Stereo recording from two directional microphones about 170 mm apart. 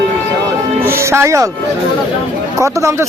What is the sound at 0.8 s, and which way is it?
Speech, 15° right (ahead or behind).